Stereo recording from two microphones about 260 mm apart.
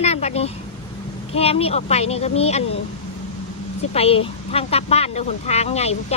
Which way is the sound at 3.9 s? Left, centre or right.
Left.